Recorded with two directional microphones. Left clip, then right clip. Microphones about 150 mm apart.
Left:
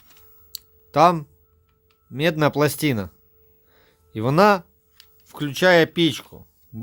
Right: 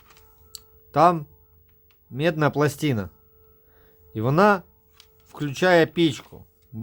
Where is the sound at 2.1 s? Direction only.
25° left (ahead or behind).